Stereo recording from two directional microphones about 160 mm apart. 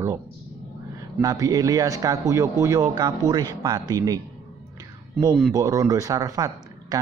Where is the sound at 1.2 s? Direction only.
20° right (ahead or behind).